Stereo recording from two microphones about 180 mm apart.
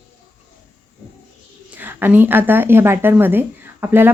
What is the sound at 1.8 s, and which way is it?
A woman's voice, 10° right (ahead or behind).